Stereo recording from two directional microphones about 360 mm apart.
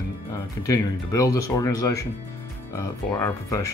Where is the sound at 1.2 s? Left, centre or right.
Left.